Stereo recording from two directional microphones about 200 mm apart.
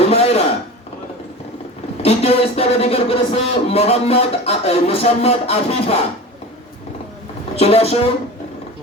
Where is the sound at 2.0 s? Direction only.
30° left (ahead or behind).